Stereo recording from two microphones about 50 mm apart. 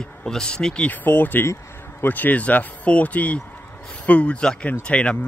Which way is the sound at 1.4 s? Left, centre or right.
Left.